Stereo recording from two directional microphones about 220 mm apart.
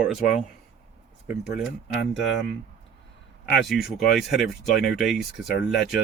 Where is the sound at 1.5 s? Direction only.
45° left (ahead or behind).